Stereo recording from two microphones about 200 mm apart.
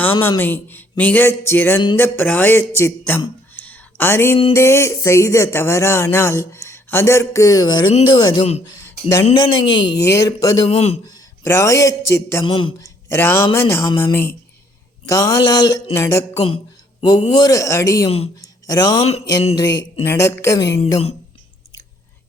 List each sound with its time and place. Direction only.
0.0 s speech: 10° left (ahead or behind)
3.5 s a sound: 10° left (ahead or behind)
4.5 s speech: 15° left (ahead or behind)
8.8 s a sound: 15° left (ahead or behind)
9.2 s a man's voice: 25° left (ahead or behind)
12.5 s speech: 25° left (ahead or behind)
13.1 s speech: 10° left (ahead or behind)